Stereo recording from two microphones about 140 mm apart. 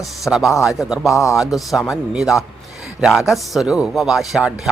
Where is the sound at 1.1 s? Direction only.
20° left (ahead or behind).